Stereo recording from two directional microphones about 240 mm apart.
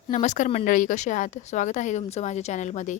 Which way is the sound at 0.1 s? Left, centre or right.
Left.